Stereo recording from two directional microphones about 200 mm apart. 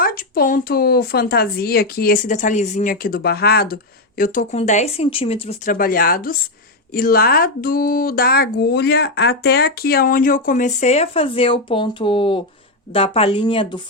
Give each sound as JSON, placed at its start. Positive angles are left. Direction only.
{"t": 0.0, "sound": "speech", "side_deg": 45}
{"t": 4.2, "sound": "speech", "side_deg": 40}
{"t": 5.7, "sound": "speech", "side_deg": 45}